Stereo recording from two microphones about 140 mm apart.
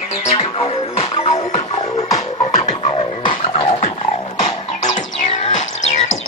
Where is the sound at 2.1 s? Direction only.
25° left (ahead or behind).